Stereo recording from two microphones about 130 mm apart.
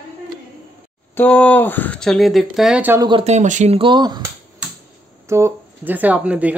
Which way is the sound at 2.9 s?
35° right (ahead or behind).